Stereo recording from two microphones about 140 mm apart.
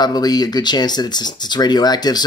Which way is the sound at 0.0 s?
30° left (ahead or behind).